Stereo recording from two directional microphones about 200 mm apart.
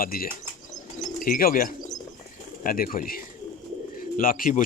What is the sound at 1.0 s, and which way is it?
Bird, 45° left (ahead or behind).